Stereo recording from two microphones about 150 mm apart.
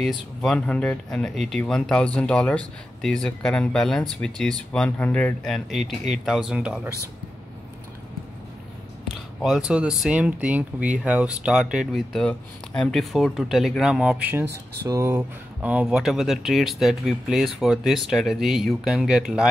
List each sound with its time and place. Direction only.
0.4 s speech: 5° left (ahead or behind)
9.4 s speech: 5° right (ahead or behind)
14.9 s speech: 20° right (ahead or behind)
15.1 s speech: 10° right (ahead or behind)